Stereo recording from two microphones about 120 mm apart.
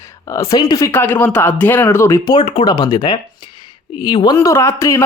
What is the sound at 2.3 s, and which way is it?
Speech, 50° left (ahead or behind).